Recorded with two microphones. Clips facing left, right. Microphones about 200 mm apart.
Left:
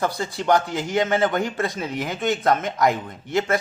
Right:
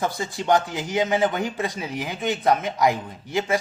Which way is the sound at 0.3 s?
20° right (ahead or behind).